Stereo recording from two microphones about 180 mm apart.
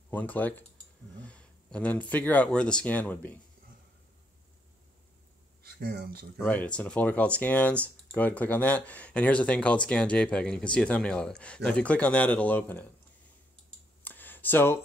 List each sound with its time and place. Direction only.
0.1 s speech: 10° left (ahead or behind)
5.6 s speech: 55° right (ahead or behind)
6.3 s speech: 10° left (ahead or behind)
14.0 s a sound: 10° left (ahead or behind)